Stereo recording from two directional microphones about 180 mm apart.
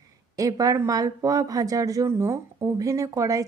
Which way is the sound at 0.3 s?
20° right (ahead or behind).